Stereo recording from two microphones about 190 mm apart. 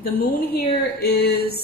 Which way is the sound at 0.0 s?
50° left (ahead or behind).